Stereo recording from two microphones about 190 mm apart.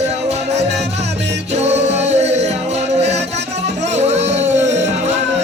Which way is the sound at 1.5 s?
35° right (ahead or behind).